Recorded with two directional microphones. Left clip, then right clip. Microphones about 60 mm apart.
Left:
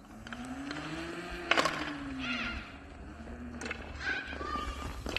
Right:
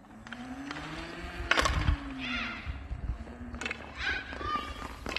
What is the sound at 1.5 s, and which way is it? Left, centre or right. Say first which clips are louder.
Music: right 1 dB; right.